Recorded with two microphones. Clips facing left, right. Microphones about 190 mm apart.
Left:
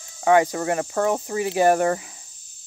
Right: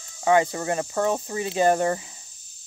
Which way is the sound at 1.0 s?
15° left (ahead or behind).